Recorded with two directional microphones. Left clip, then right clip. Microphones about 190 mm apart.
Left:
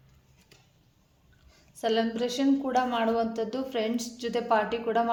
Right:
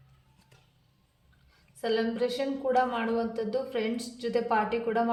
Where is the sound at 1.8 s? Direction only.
40° left (ahead or behind).